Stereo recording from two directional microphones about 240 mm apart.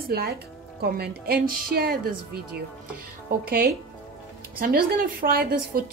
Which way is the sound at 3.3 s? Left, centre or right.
Right.